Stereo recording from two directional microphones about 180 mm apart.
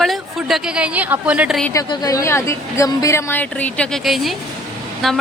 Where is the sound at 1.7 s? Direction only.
20° left (ahead or behind); by 5.2 s centre (ahead or behind).